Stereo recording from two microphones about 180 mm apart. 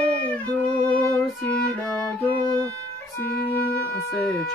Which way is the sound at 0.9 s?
5° left (ahead or behind).